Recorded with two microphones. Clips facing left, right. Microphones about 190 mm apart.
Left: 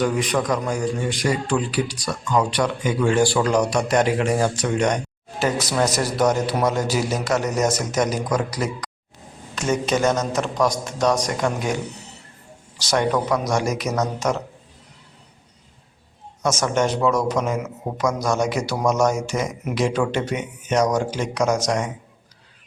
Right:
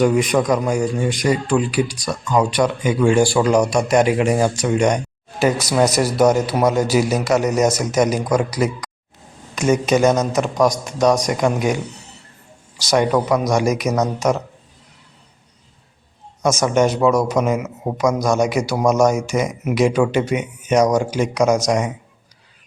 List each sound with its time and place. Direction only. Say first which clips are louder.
0.0 s speech: right 5 dB; 15° right (ahead or behind)
12.9 s speech: right 4 dB; 10° right (ahead or behind)
16.4 s speech: right 5 dB; 10° right (ahead or behind)